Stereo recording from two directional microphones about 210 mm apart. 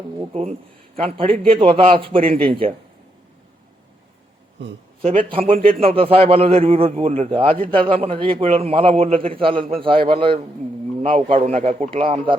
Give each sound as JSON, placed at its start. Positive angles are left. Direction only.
{"t": 0.9, "sound": "a man's voice", "side_deg": -25}
{"t": 4.6, "sound": "speech", "side_deg": -55}
{"t": 5.0, "sound": "a man's voice", "side_deg": -25}